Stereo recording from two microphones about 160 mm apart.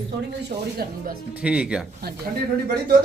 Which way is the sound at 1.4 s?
5° right (ahead or behind).